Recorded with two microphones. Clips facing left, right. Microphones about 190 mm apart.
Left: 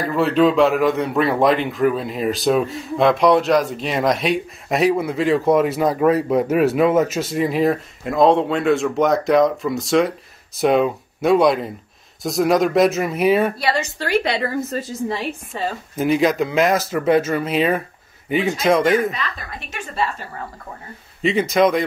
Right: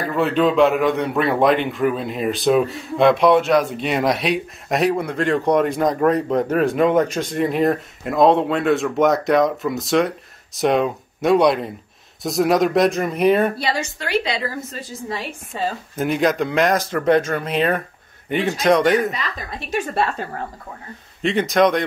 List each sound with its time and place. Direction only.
0.0 s speech: centre (ahead or behind)
13.9 s speech: 45° left (ahead or behind)
14.2 s speech: 60° left (ahead or behind)
16.0 s speech: centre (ahead or behind)
21.2 s speech: centre (ahead or behind)